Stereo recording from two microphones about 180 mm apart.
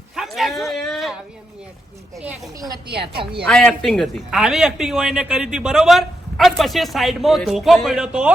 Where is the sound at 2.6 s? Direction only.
20° right (ahead or behind).